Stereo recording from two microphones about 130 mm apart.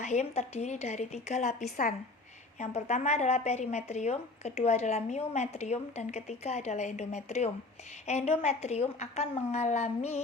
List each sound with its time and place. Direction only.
0.0 s speech: 60° left (ahead or behind); by 2.0 s 80° left
2.6 s speech: 60° left (ahead or behind)